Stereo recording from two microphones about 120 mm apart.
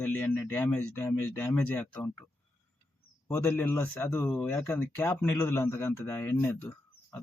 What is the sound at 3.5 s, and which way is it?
Speech, 20° left (ahead or behind).